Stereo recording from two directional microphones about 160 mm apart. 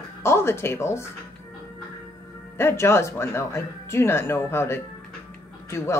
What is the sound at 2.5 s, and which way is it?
Speech, 15° left (ahead or behind).